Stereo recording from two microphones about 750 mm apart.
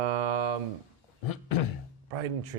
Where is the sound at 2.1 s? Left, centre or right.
Right.